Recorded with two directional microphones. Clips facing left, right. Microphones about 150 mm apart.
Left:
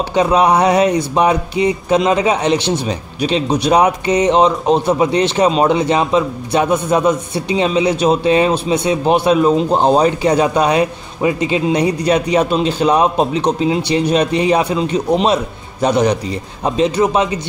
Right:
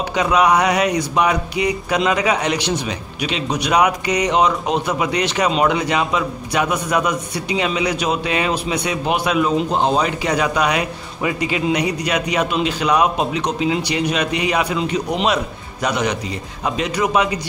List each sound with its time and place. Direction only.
0.1 s a man's voice: 30° left (ahead or behind)